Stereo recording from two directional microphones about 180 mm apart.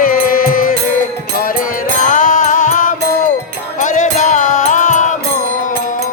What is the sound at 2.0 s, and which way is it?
Music, 45° left (ahead or behind).